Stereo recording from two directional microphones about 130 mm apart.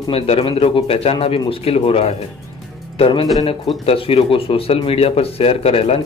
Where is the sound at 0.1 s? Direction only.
45° left (ahead or behind).